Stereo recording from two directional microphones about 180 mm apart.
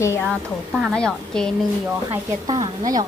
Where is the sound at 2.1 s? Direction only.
20° right (ahead or behind).